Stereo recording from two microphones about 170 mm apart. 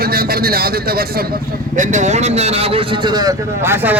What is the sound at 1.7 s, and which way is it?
A man's voice, 45° right (ahead or behind).